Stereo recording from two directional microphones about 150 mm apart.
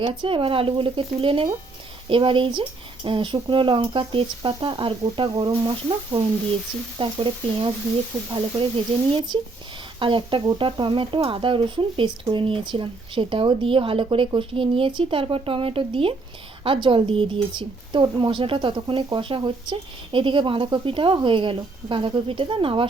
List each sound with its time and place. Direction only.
0.0 s speech: 35° right (ahead or behind)